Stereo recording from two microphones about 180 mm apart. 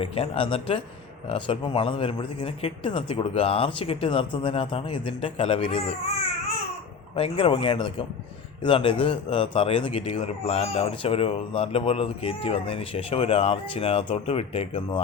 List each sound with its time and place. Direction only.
0.0 s speech: 30° left (ahead or behind)
7.2 s speech: 30° left (ahead or behind)